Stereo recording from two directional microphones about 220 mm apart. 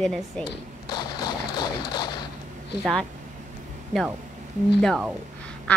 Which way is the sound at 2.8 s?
Centre (ahead or behind).